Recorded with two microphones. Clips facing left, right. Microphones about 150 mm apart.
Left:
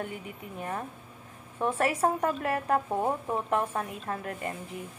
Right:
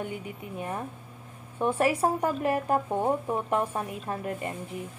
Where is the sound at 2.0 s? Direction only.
20° right (ahead or behind).